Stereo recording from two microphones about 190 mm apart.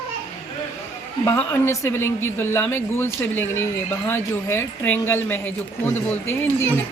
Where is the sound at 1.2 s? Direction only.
10° left (ahead or behind).